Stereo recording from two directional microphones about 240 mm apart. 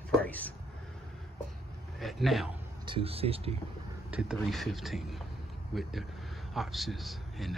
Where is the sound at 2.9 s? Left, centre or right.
Right.